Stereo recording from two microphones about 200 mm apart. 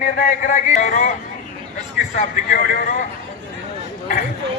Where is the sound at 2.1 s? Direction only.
40° left (ahead or behind).